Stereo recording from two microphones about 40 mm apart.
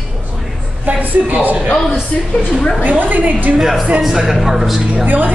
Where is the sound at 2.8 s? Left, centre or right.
Right.